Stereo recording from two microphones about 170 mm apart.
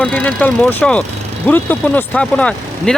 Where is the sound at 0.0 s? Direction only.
10° left (ahead or behind).